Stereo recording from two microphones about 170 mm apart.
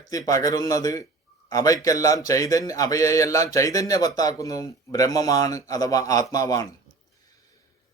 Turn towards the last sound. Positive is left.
turn(degrees=20)  # may be behind; listen again after turning